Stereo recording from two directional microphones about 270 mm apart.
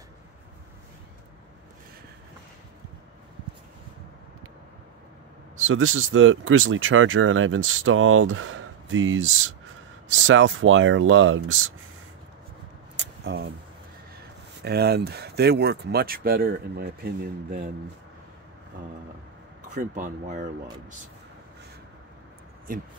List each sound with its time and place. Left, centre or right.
5.6 s speech: right
13.0 s a sound: right
14.6 s speech: right
19.7 s speech: right
22.7 s speech: right